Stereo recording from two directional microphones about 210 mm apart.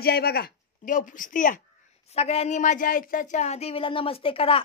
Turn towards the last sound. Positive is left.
turn(degrees=25)  # may be behind; listen again after turning